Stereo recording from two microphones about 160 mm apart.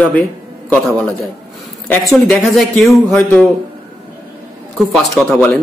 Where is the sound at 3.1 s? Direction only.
10° left (ahead or behind).